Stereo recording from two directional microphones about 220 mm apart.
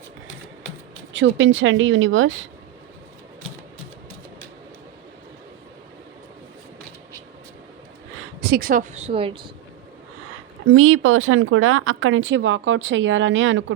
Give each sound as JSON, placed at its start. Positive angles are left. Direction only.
{"t": 1.1, "sound": "speech", "side_deg": -60}
{"t": 8.4, "sound": "speech", "side_deg": -45}
{"t": 10.7, "sound": "speech", "side_deg": -70}